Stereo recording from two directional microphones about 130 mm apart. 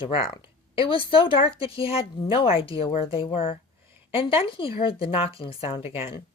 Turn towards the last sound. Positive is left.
turn(degrees=45)  # may be behind; listen again after turning